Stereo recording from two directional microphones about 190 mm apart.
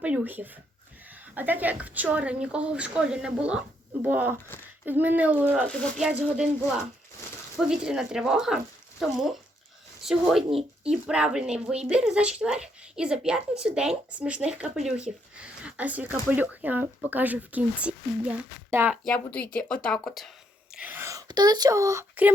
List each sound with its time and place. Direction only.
0.0 s speech: 10° right (ahead or behind)
7.5 s speech: 5° right (ahead or behind)
19.0 s speech: 5° left (ahead or behind)
20.7 s speech: 10° right (ahead or behind)